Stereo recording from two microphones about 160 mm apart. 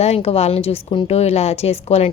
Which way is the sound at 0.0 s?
40° left (ahead or behind).